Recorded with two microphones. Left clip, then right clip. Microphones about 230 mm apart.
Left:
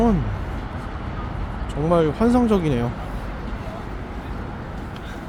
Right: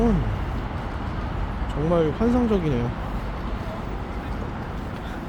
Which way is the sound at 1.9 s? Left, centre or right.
Centre.